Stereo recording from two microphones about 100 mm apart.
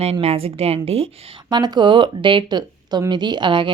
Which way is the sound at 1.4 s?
45° right (ahead or behind).